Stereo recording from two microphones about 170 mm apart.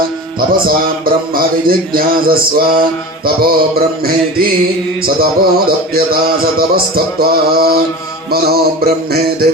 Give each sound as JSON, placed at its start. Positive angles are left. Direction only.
{"t": 1.0, "sound": "speech", "side_deg": -60}